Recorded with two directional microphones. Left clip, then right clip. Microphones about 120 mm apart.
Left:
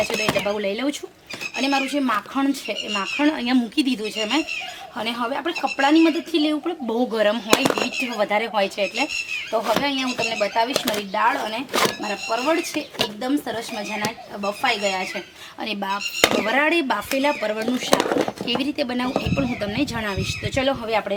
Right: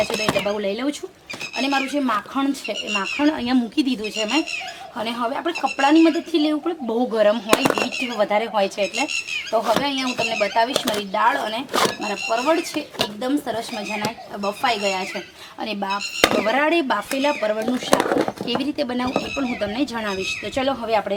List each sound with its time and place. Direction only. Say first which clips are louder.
0.4 s speech: even; 5° left (ahead or behind)
7.5 s speech: right 1 dB; centre (ahead or behind)